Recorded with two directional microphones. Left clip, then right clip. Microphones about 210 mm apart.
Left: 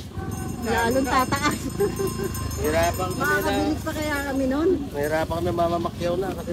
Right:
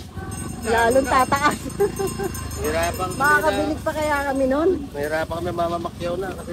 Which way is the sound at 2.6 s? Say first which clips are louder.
Even; 50° left (ahead or behind).